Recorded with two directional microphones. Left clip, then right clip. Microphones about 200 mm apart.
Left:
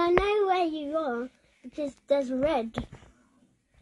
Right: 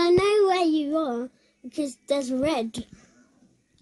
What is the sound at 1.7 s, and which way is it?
Speech, 75° right (ahead or behind).